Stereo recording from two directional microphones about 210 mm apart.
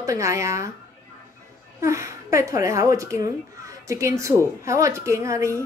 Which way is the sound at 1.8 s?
15° right (ahead or behind).